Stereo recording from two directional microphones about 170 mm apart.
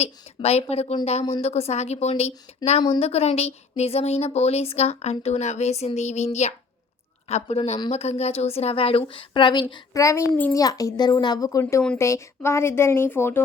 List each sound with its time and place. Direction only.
0.0 s speech: 35° left (ahead or behind); by 13.4 s 15° left (ahead or behind)